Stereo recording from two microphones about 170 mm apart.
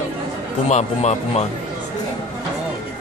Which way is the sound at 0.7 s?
40° left (ahead or behind).